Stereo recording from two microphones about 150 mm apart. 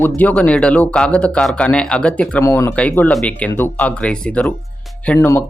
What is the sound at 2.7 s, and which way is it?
Speech, 10° left (ahead or behind).